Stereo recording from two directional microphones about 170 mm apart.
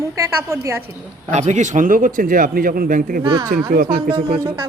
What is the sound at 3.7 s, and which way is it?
Speech, 60° right (ahead or behind).